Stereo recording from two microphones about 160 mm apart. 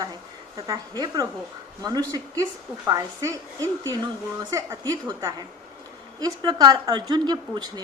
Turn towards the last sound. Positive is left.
turn(degrees=-25)  # may be behind; listen again after turning